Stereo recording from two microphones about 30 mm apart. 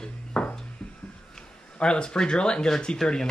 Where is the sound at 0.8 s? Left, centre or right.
Left.